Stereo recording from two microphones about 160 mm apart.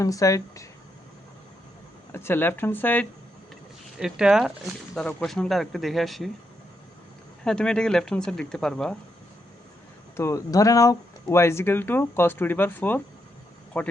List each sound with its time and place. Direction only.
0.0 s speech: 20° left (ahead or behind)
2.1 s speech: 15° left (ahead or behind)
3.9 s speech: 5° right (ahead or behind)
7.4 s speech: 5° left (ahead or behind)
10.2 s speech: 20° left (ahead or behind)